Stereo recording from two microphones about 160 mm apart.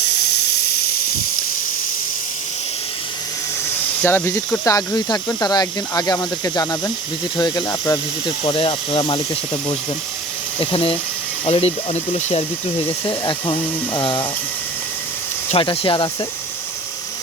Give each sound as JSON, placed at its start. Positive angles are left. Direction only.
{"t": 0.0, "sound": "a sound", "side_deg": 90}
{"t": 4.0, "sound": "speech", "side_deg": 15}
{"t": 8.4, "sound": "speech", "side_deg": 35}
{"t": 10.6, "sound": "speech", "side_deg": 35}
{"t": 13.1, "sound": "speech", "side_deg": 30}
{"t": 15.5, "sound": "speech", "side_deg": 35}